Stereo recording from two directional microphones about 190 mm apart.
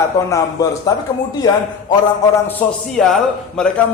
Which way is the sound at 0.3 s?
15° left (ahead or behind).